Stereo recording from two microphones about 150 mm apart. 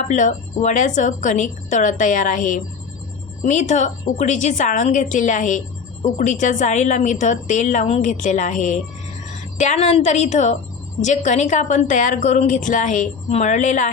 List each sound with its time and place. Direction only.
0.1 s a woman's voice: 55° left (ahead or behind)